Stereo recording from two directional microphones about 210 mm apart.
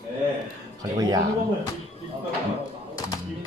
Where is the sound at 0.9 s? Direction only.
20° right (ahead or behind).